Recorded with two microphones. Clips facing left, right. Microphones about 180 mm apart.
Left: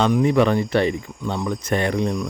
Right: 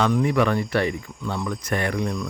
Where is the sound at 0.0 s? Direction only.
20° left (ahead or behind).